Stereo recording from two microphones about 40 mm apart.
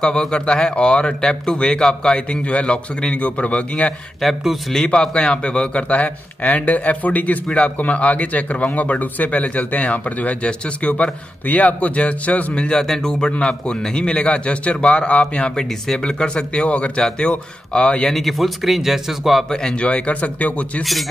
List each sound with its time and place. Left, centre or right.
0.0 s speech: left
3.2 s speech: left
4.2 s speech: centre
4.8 s speech: left
12.6 s speech: centre
13.4 s speech: left
14.1 s speech: left
16.0 s speech: centre
16.6 s speech: left
18.1 s speech: centre
19.7 s speech: left